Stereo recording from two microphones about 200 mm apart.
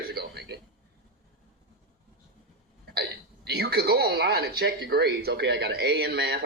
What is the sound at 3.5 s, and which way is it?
Speech, 55° right (ahead or behind).